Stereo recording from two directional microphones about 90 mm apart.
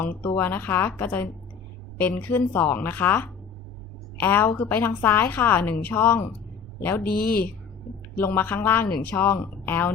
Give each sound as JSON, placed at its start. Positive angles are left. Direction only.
{"t": 0.0, "sound": "a woman's voice", "side_deg": 25}